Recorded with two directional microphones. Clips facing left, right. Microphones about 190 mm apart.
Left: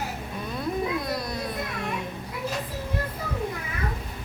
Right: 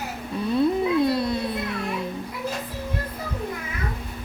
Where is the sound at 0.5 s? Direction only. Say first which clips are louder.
Right 8 dB; 30° right (ahead or behind).